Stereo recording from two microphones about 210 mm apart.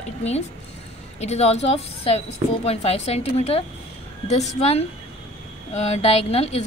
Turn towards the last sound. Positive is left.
turn(degrees=30)  # may be behind; listen again after turning